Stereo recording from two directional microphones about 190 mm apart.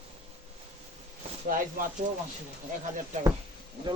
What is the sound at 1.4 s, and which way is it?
Speech, 45° right (ahead or behind).